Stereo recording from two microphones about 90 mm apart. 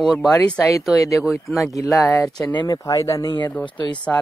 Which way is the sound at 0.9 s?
35° left (ahead or behind).